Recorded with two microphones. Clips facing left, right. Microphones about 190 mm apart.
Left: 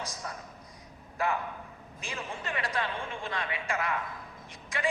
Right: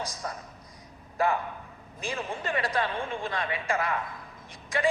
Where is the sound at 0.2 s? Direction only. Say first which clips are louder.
Right 5 dB; 40° right (ahead or behind).